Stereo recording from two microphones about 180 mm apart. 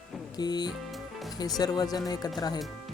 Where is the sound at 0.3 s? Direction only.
25° left (ahead or behind).